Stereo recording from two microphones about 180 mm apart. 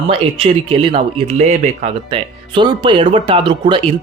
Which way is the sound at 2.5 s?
25° right (ahead or behind).